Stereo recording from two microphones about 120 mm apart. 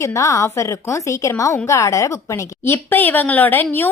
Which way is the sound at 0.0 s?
25° left (ahead or behind).